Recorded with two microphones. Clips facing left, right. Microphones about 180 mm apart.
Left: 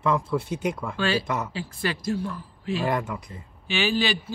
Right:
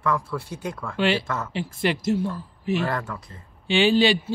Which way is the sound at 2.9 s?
15° left (ahead or behind).